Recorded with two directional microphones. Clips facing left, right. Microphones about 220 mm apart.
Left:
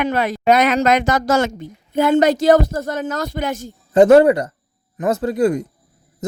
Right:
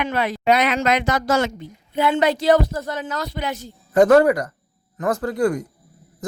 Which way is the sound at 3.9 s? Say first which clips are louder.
Left 4 dB; 25° left (ahead or behind).